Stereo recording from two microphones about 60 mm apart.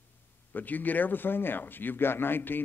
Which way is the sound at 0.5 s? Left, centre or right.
Left.